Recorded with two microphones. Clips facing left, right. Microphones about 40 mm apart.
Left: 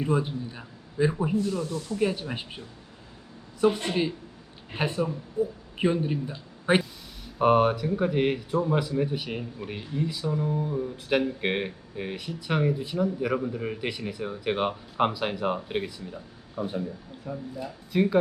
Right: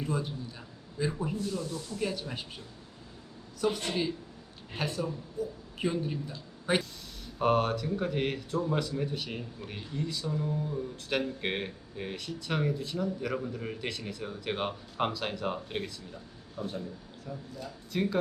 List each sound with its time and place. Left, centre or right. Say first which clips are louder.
0.0 s a man's voice: left 7 dB; left
3.6 s a man's voice: left 6 dB; left